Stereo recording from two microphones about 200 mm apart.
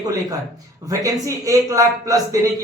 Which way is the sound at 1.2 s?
15° right (ahead or behind).